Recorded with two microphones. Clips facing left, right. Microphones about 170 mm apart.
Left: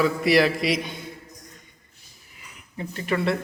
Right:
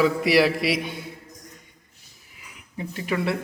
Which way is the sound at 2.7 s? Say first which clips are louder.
Left 1 dB; 10° right (ahead or behind).